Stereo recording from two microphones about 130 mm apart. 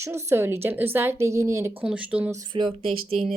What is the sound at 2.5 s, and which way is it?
Speech, 40° right (ahead or behind).